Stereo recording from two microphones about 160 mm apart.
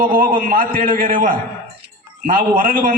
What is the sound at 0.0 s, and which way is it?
A man's voice, 60° right (ahead or behind).